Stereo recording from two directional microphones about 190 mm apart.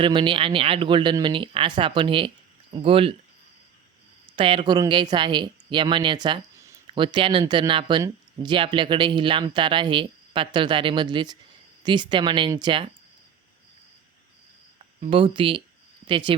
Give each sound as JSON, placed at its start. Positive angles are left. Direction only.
{"t": 0.0, "sound": "a woman's voice", "side_deg": -25}
{"t": 4.4, "sound": "a woman's voice", "side_deg": -30}
{"t": 15.0, "sound": "a woman's voice", "side_deg": -25}